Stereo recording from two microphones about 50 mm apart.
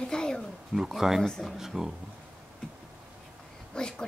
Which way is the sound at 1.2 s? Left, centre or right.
Centre.